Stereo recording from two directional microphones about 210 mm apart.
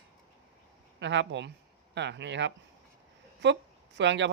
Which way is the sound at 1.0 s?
60° right (ahead or behind).